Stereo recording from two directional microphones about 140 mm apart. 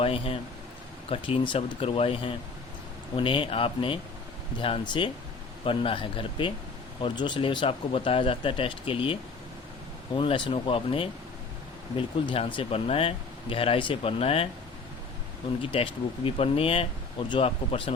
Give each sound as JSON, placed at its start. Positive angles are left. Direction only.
{"t": 0.0, "sound": "speech", "side_deg": 40}
{"t": 10.2, "sound": "speech", "side_deg": 40}
{"t": 15.6, "sound": "speech", "side_deg": 40}